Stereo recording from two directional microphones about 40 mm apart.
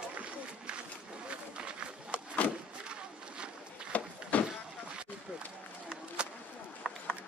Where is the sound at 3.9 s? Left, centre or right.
Left.